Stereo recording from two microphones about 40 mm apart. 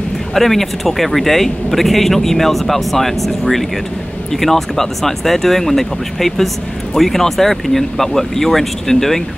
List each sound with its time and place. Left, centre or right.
0.3 s speech: centre